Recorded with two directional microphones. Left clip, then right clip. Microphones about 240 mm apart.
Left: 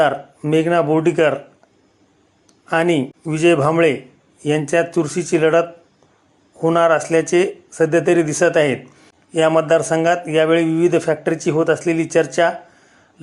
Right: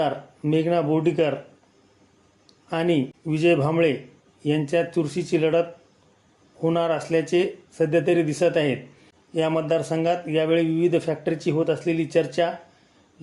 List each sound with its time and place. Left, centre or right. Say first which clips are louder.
0.0 s speech: left 8 dB; centre
2.6 s speech: left 6 dB; centre